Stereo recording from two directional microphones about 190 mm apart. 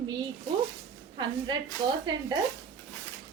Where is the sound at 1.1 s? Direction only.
25° right (ahead or behind).